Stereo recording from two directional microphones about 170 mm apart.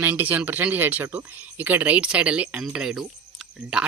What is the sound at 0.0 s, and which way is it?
Speech, 10° right (ahead or behind).